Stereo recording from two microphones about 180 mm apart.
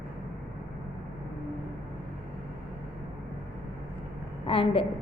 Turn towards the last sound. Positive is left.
turn(degrees=30)  # may be behind; listen again after turning